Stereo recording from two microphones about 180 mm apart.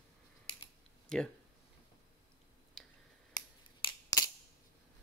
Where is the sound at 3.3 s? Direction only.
20° left (ahead or behind).